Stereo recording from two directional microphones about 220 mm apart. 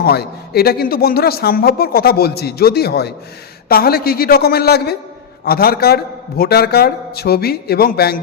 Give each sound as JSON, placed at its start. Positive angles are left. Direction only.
{"t": 0.0, "sound": "a man's voice", "side_deg": 45}